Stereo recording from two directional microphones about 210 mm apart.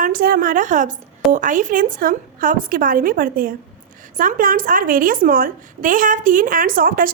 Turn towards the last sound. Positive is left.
turn(degrees=-40)  # may be behind; listen again after turning